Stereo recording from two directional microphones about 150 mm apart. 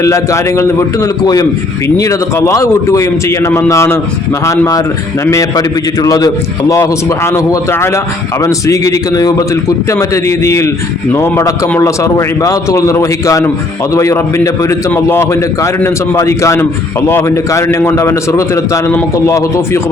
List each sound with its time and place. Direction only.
0.0 s a man's voice: 20° left (ahead or behind)